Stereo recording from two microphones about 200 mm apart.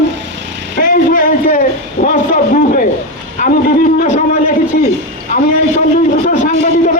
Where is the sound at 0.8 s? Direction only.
45° left (ahead or behind).